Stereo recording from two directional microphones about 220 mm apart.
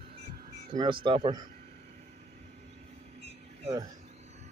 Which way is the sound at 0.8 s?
25° right (ahead or behind).